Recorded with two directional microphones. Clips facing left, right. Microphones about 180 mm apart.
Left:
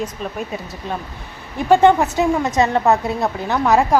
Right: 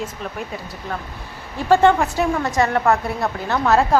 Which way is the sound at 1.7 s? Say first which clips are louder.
Left 2 dB; 20° left (ahead or behind).